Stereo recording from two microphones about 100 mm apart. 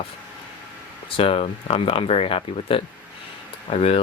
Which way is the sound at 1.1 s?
70° left (ahead or behind).